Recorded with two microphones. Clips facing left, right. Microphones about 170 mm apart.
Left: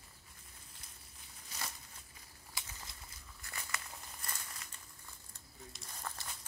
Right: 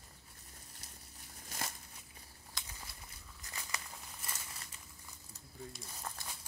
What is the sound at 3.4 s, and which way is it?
Crumpling, 15° right (ahead or behind).